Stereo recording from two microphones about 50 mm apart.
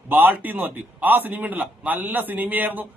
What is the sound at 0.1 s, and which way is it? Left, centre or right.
Speech, right.